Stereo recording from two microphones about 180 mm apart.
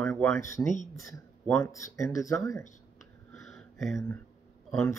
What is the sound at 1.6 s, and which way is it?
Speech, 15° left (ahead or behind).